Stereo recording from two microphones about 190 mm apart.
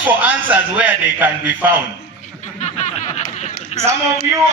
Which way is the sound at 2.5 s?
35° left (ahead or behind).